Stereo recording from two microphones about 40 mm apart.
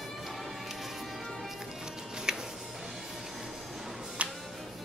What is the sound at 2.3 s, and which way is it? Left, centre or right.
Music, centre.